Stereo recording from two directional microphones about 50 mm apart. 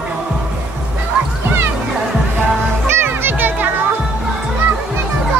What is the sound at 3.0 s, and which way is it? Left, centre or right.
Music, right.